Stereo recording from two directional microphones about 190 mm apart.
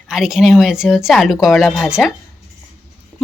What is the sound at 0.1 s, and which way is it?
Speech, 5° right (ahead or behind).